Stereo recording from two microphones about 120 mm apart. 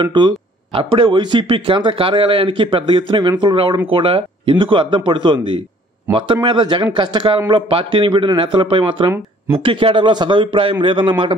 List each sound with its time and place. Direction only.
0.0 s speech: 40° right (ahead or behind)